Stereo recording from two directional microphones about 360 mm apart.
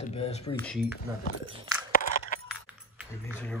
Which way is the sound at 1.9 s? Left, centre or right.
Left.